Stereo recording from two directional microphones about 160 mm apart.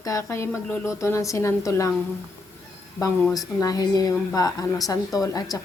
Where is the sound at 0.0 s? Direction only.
20° left (ahead or behind).